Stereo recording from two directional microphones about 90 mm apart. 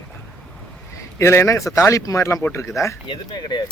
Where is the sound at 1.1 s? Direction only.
30° left (ahead or behind).